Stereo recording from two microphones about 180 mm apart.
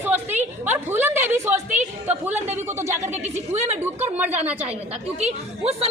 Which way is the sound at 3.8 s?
10° right (ahead or behind).